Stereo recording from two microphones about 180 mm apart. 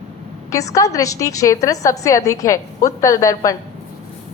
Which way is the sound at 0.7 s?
20° left (ahead or behind).